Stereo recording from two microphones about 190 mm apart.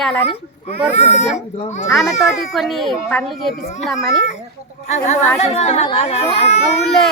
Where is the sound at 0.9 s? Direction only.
35° left (ahead or behind).